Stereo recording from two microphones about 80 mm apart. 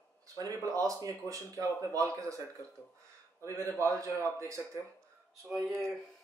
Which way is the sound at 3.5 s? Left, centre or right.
Left.